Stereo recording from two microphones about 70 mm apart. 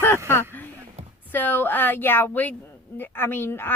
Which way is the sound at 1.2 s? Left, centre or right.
Left.